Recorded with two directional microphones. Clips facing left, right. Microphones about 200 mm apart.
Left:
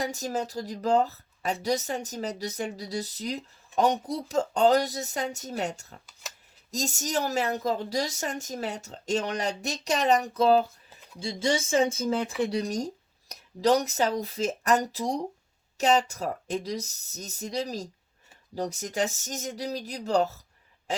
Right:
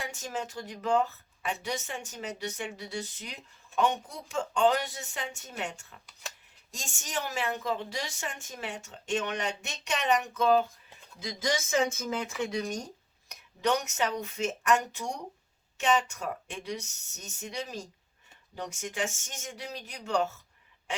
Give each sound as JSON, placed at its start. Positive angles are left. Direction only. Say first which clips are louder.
{"t": 0.0, "sound": "speech", "louder": "left 6 dB", "side_deg": 40}
{"t": 10.8, "sound": "a sound", "louder": "left 3 dB", "side_deg": 5}
{"t": 11.2, "sound": "speech", "louder": "left 4 dB", "side_deg": 30}